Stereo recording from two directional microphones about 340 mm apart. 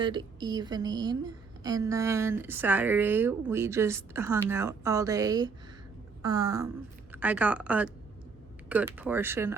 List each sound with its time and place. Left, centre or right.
0.0 s a woman's voice: centre